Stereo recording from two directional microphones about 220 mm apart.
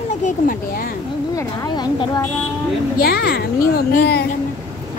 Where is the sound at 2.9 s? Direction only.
45° left (ahead or behind).